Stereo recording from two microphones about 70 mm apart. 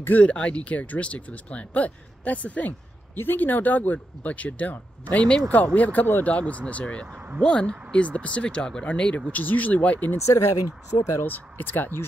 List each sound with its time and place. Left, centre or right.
0.2 s speech: centre
10.1 s speech: left
11.2 s speech: left